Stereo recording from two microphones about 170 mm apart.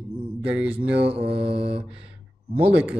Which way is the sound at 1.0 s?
35° right (ahead or behind).